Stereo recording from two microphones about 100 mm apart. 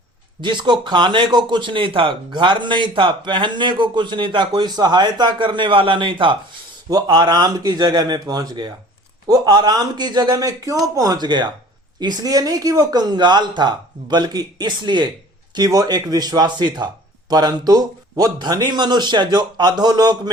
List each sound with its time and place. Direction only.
0.4 s speech: 50° right (ahead or behind)
6.9 s speech: 45° right (ahead or behind)